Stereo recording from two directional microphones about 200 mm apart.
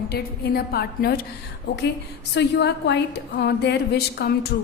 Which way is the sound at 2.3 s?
60° left (ahead or behind).